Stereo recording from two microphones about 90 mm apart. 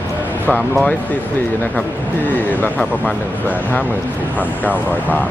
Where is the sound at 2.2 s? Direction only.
20° left (ahead or behind).